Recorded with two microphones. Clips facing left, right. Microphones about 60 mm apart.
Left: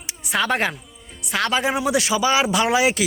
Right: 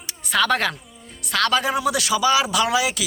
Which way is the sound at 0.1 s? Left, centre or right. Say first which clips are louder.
Right 2 dB; centre.